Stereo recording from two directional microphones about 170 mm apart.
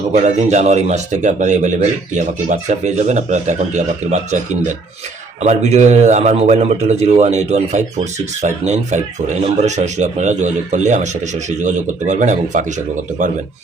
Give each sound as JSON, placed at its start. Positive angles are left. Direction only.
{"t": 0.1, "sound": "a man's voice", "side_deg": -40}